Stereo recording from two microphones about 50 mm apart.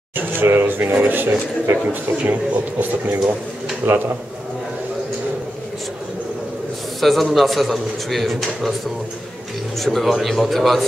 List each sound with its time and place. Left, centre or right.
0.4 s speech: right
7.0 s a man's voice: centre
9.8 s a man's voice: centre